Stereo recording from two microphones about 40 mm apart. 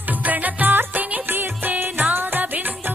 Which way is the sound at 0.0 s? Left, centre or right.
Right.